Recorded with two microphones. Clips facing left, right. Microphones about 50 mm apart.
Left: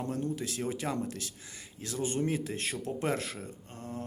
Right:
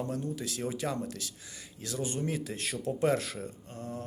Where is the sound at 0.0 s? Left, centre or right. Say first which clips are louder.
Left 1 dB; left.